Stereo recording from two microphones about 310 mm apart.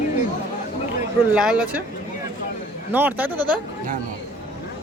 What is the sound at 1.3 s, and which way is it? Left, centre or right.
Speech, centre.